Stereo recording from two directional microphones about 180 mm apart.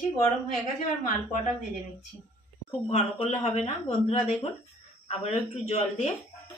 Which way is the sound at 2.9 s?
35° left (ahead or behind).